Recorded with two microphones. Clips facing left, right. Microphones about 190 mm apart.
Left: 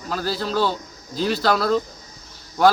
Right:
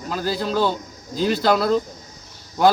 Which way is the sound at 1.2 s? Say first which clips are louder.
Right 2 dB; 50° right (ahead or behind).